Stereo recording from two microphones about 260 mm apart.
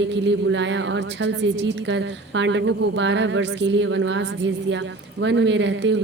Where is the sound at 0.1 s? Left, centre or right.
Right.